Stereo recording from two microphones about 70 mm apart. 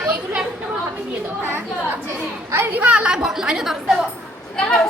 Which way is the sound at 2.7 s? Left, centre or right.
Centre.